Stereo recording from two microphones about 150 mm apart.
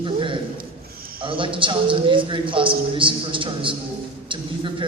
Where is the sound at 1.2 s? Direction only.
35° right (ahead or behind).